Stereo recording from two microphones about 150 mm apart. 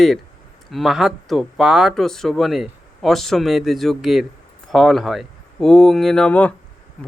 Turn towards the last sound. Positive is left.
turn(degrees=10)  # may be behind; listen again after turning